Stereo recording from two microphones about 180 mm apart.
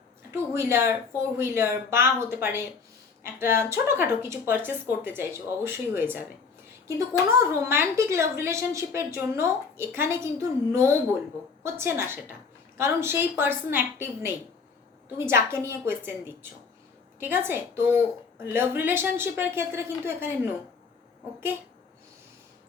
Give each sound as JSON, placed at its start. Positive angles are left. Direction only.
{"t": 0.3, "sound": "a woman's voice", "side_deg": -15}